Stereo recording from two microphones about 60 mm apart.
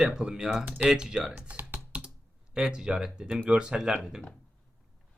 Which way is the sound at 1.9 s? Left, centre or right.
Centre.